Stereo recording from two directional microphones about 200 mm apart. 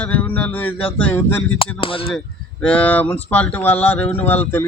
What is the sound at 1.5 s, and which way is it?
Speech, 30° left (ahead or behind).